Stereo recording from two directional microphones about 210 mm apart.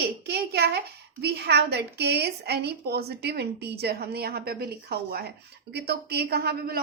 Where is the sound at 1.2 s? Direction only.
50° right (ahead or behind).